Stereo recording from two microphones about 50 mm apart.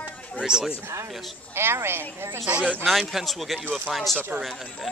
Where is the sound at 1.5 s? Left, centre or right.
Right.